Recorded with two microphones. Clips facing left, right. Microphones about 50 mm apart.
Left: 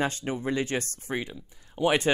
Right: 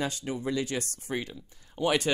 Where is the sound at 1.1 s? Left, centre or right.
Centre.